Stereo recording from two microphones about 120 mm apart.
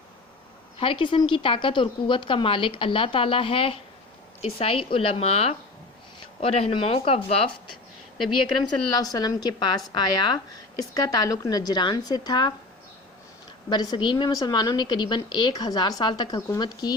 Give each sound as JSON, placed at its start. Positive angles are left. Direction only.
{"t": 0.8, "sound": "a woman's voice", "side_deg": 45}
{"t": 8.6, "sound": "a woman's voice", "side_deg": 35}
{"t": 10.9, "sound": "a woman's voice", "side_deg": 35}
{"t": 13.7, "sound": "a woman's voice", "side_deg": 35}